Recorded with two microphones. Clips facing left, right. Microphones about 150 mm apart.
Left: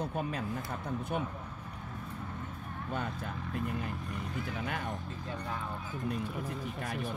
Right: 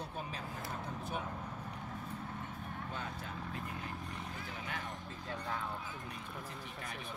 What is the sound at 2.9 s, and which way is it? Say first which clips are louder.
Speech: left 10 dB; 60° left (ahead or behind).